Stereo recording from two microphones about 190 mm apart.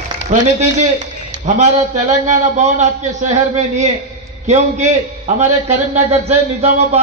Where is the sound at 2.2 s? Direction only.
40° right (ahead or behind).